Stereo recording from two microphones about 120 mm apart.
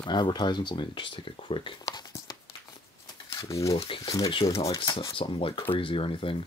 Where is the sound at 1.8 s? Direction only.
30° left (ahead or behind).